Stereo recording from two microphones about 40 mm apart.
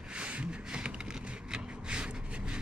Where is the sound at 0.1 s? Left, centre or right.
Right.